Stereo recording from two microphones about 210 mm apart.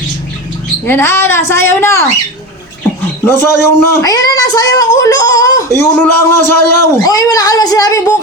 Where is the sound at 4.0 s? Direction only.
15° left (ahead or behind).